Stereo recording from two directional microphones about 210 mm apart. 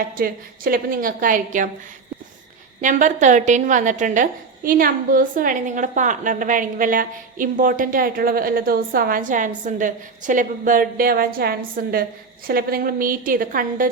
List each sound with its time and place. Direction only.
0.2 s a woman's voice: 45° right (ahead or behind)
2.8 s a woman's voice: 35° right (ahead or behind)